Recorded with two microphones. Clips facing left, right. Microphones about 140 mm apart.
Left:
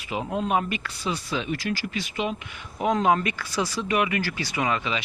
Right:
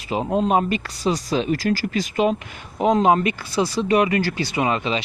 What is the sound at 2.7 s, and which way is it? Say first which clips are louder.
Speech: right 5 dB; 25° right (ahead or behind).